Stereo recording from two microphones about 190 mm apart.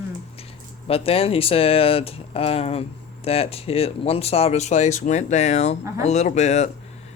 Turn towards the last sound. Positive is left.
turn(degrees=35)  # may be behind; listen again after turning